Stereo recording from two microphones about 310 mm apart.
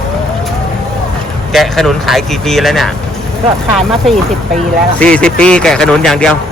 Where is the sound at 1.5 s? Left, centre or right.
Centre.